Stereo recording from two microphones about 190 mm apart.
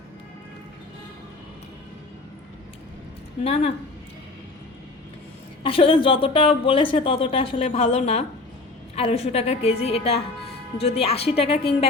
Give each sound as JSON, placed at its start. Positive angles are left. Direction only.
{"t": 3.4, "sound": "a woman's voice", "side_deg": 30}
{"t": 5.6, "sound": "a woman's voice", "side_deg": 30}